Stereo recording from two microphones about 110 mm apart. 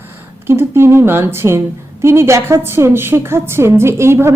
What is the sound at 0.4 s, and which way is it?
A woman's voice, 20° right (ahead or behind).